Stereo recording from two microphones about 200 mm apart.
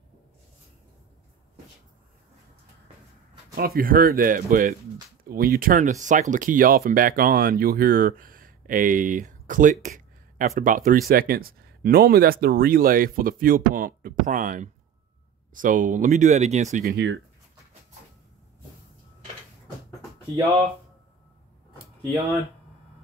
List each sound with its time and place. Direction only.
3.5 s speech: 50° right (ahead or behind)
16.8 s speech: 55° right (ahead or behind)